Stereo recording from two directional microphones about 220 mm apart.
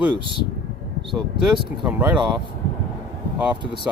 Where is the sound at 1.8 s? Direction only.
5° right (ahead or behind).